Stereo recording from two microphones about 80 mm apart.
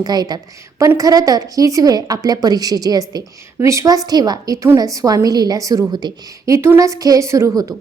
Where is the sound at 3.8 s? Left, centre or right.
Right.